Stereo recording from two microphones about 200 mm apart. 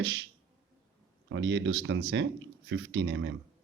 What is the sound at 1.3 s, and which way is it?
Speech, 65° right (ahead or behind).